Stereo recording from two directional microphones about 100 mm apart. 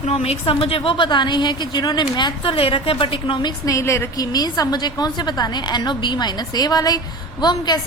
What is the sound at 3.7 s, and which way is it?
Speech, 30° left (ahead or behind).